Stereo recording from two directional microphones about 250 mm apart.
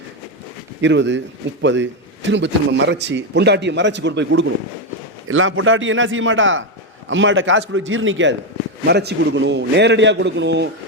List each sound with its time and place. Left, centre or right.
0.8 s a man's voice: right